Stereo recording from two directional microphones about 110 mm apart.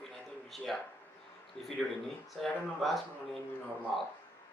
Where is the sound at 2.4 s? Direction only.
Centre (ahead or behind).